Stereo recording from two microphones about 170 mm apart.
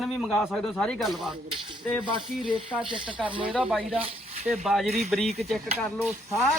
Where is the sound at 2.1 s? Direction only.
30° right (ahead or behind).